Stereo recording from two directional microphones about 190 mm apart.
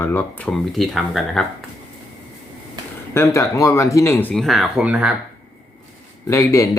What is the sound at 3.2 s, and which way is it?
Speech, 15° left (ahead or behind).